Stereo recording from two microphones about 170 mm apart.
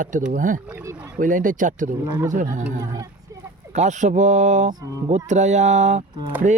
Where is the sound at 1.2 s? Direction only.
50° right (ahead or behind).